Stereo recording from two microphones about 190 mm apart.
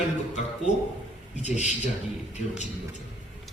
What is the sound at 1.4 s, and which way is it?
Speech, 40° left (ahead or behind).